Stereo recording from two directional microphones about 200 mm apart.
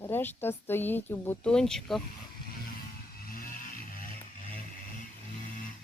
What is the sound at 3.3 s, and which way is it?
Vehicle, 45° left (ahead or behind).